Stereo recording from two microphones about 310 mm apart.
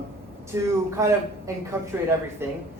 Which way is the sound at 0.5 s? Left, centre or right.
Centre.